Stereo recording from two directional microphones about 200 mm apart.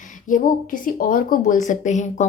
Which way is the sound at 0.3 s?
40° left (ahead or behind).